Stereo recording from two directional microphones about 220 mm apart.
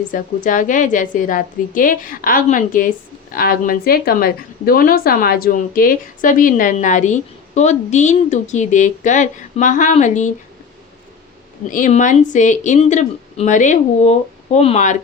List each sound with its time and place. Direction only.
0.1 s a woman's voice: 35° left (ahead or behind)
11.7 s a woman's voice: 35° left (ahead or behind)